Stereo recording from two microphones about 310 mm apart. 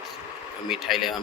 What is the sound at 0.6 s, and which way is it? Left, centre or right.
Speech, centre.